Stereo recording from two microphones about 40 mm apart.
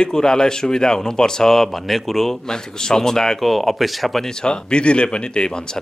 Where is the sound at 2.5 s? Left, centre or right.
Centre.